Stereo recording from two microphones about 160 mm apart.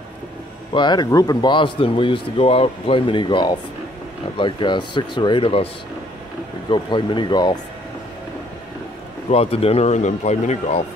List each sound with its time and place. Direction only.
0.7 s speech: 25° left (ahead or behind)
6.7 s speech: 30° left (ahead or behind)
9.3 s speech: 40° left (ahead or behind)